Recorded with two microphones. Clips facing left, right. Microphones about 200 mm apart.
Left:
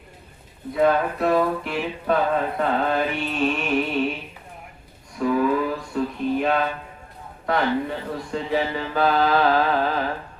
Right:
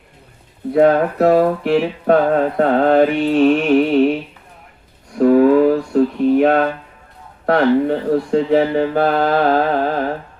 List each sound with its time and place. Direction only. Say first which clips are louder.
0.7 s mantra: right 7 dB; 60° right (ahead or behind)
5.1 s a sound: right 10 dB; 60° right (ahead or behind)
7.4 s mantra: right 9 dB; 65° right (ahead or behind); by 10.1 s 50° right (ahead or behind)